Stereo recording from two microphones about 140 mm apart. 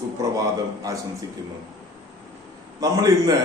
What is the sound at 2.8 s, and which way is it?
Speech, 25° right (ahead or behind).